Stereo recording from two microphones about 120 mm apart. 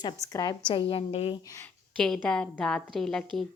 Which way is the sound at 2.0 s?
5° left (ahead or behind).